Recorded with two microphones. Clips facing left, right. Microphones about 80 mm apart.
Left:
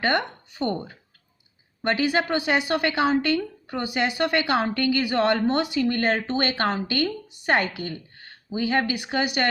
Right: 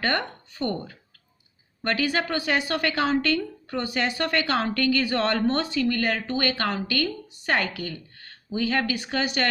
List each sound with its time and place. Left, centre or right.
0.0 s a woman's voice: centre